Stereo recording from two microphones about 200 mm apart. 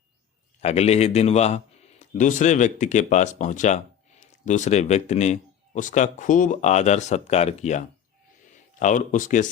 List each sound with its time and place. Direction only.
0.6 s a man's voice: 30° left (ahead or behind)